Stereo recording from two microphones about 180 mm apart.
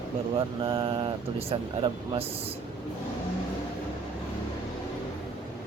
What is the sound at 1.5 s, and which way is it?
Speech, 30° right (ahead or behind).